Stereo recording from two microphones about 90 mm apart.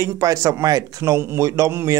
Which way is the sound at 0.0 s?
40° right (ahead or behind).